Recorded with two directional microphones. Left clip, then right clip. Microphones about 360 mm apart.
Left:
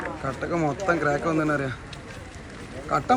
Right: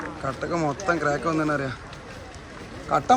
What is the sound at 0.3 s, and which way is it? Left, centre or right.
Speech, centre.